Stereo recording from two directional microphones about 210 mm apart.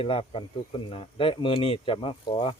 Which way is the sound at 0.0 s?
25° left (ahead or behind).